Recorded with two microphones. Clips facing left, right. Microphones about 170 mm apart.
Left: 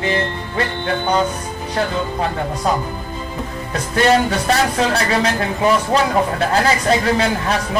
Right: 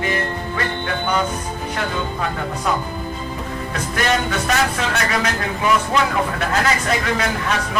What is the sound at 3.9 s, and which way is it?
Speech, 30° left (ahead or behind).